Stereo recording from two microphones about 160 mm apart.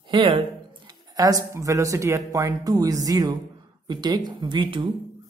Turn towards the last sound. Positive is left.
turn(degrees=-30)  # may be behind; listen again after turning